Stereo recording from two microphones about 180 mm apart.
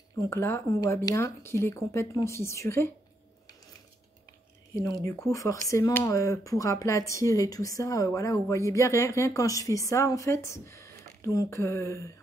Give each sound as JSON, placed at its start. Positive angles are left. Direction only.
{"t": 0.2, "sound": "speech", "side_deg": 15}
{"t": 5.0, "sound": "speech", "side_deg": 15}